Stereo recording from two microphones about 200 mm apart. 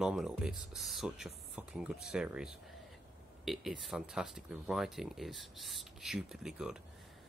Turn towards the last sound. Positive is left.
turn(degrees=-5)  # may be behind; listen again after turning